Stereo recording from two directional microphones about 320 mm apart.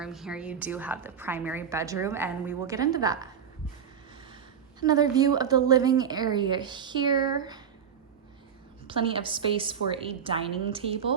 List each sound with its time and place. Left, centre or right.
0.0 s a woman's voice: centre
4.8 s a woman's voice: centre
8.9 s a woman's voice: centre